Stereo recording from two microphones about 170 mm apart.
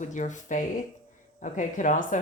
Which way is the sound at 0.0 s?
45° left (ahead or behind).